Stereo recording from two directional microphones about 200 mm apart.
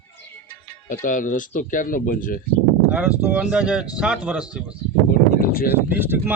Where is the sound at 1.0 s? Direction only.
40° left (ahead or behind).